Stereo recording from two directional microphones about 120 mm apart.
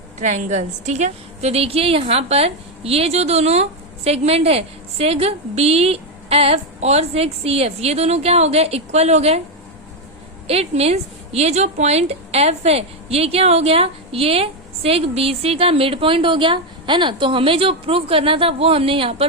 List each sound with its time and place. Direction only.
0.2 s a woman's voice: 85° right; by 9.4 s 65° right (ahead or behind)
10.4 s a woman's voice: 55° right (ahead or behind)